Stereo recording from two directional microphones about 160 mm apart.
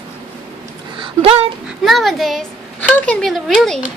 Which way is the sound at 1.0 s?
35° right (ahead or behind).